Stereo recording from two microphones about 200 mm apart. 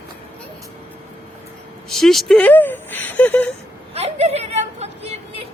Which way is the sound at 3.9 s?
30° right (ahead or behind).